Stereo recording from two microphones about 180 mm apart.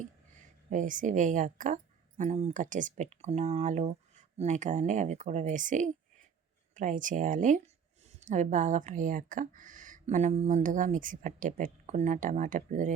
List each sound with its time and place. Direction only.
0.7 s speech: 45° right (ahead or behind)